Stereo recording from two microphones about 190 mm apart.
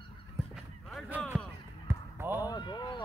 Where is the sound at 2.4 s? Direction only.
20° left (ahead or behind).